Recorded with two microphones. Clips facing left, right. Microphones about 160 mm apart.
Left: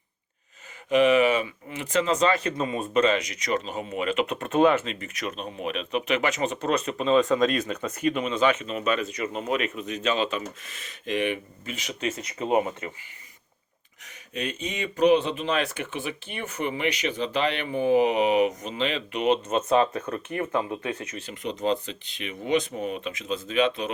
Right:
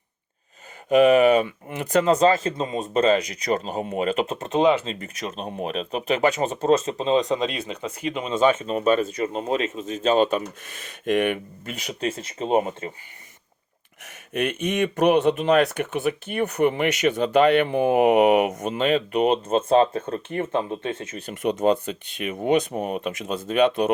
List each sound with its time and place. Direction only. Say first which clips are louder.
0.9 s speech: right 4 dB; 45° right (ahead or behind)
1.5 s speech: right 5 dB; 55° right (ahead or behind)
2.1 s speech: right 5 dB; 35° right (ahead or behind)
2.5 s speech: right 1 dB; 25° right (ahead or behind)
4.4 s speech: right 1 dB; 20° right (ahead or behind)
4.8 s speech: right 2 dB; 35° right (ahead or behind)
6.7 s speech: even; 25° right (ahead or behind)
8.6 s speech: right 6 dB; 35° right (ahead or behind)
10.1 s speech: right 7 dB; 45° right (ahead or behind)
11.9 s speech: right 3 dB; 30° right (ahead or behind)
14.3 s speech: right 8 dB; 65° right (ahead or behind); by 16.4 s 45° right (ahead or behind)
16.4 s speech: right 7 dB; 60° right (ahead or behind)
18.8 s speech: right 7 dB; 45° right (ahead or behind); by 21.2 s 25° right (ahead or behind)
21.2 s speech: right 6 dB; 55° right (ahead or behind)